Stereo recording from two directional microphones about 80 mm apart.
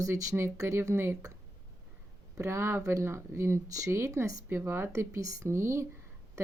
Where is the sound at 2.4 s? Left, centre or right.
Right.